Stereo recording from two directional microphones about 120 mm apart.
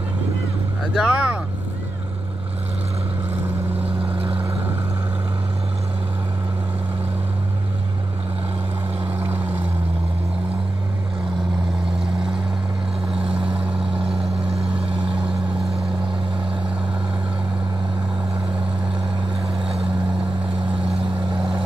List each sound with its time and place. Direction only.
0.9 s speech: 10° right (ahead or behind)
9.2 s vehicle: 15° right (ahead or behind)
14.7 s vehicle: 45° right (ahead or behind)